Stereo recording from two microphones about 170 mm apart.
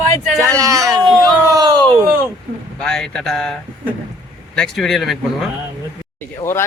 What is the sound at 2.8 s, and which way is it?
Speech, 5° left (ahead or behind).